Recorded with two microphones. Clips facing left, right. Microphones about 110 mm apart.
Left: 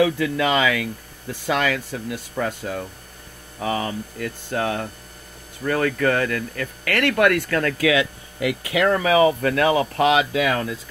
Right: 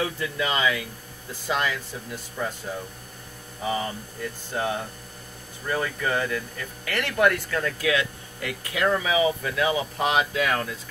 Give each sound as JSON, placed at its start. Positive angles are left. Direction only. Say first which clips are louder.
{"t": 0.0, "sound": "speech", "louder": "left 8 dB", "side_deg": 90}